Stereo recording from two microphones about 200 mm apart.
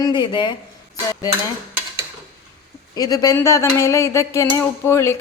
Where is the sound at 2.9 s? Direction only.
20° left (ahead or behind).